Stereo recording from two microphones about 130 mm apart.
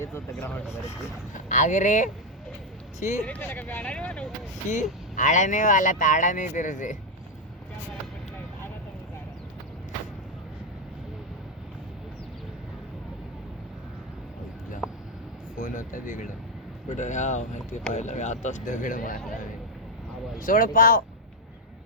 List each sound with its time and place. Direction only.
0.0 s speech: 20° left (ahead or behind)
1.5 s speech: 70° left (ahead or behind)
3.2 s speech: 10° left (ahead or behind)
5.1 s speech: 75° left (ahead or behind)
15.5 s a sound: 90° left
16.9 s speech: 65° left (ahead or behind); by 19.2 s 90° left
20.4 s speech: 90° left